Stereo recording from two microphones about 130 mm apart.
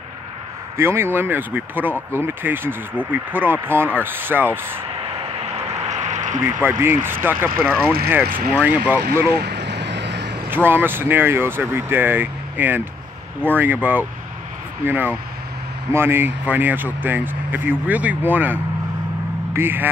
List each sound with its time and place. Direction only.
0.7 s speech: 20° right (ahead or behind)
6.0 s a sound: 70° right (ahead or behind)
6.4 s speech: 15° right (ahead or behind)
10.5 s speech: 15° right (ahead or behind)